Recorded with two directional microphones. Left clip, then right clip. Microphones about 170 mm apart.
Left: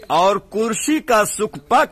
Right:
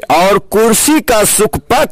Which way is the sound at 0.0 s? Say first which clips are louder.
Right 7 dB; 50° right (ahead or behind).